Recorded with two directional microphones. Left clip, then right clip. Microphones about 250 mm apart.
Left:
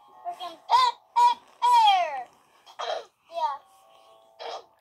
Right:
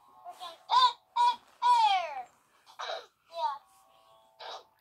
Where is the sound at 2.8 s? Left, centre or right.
Left.